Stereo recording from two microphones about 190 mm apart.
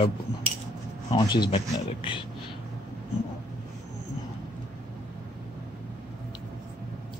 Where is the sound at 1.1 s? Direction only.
20° left (ahead or behind).